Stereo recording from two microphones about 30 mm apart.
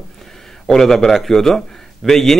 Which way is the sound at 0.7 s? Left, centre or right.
Centre.